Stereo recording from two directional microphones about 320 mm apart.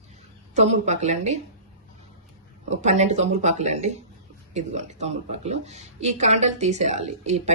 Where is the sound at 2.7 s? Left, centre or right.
Right.